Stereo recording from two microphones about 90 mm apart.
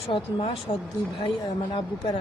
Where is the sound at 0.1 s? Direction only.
80° left.